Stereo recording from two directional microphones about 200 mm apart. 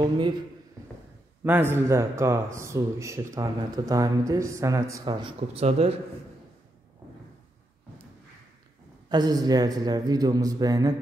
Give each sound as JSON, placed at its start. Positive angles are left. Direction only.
{"t": 1.4, "sound": "a man's voice", "side_deg": -10}
{"t": 9.1, "sound": "a man's voice", "side_deg": -20}